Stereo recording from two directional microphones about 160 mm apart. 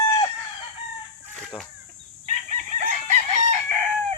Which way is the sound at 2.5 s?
50° right (ahead or behind).